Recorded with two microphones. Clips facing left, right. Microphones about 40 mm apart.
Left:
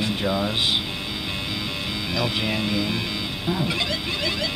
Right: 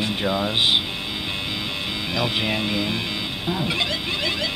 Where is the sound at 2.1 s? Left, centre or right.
Centre.